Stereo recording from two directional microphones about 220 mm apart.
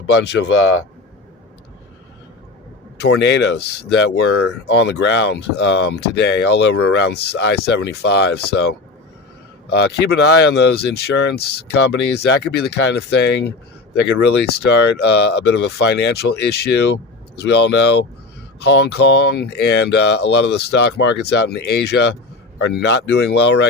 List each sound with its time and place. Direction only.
0.1 s speech: 55° left (ahead or behind)
3.0 s speech: 50° left (ahead or behind)